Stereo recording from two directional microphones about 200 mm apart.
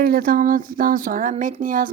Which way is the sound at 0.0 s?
45° right (ahead or behind).